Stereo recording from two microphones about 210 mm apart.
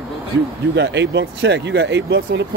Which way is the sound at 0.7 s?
55° right (ahead or behind).